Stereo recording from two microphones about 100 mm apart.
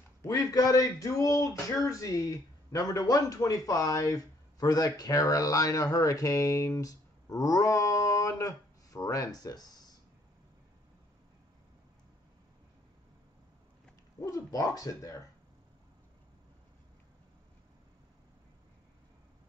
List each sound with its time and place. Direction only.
0.2 s speech: 35° left (ahead or behind)
14.2 s speech: 35° left (ahead or behind)